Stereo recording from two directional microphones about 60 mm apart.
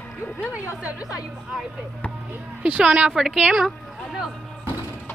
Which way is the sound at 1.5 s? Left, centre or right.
Centre.